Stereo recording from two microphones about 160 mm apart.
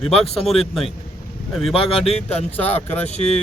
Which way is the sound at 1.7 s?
35° left (ahead or behind).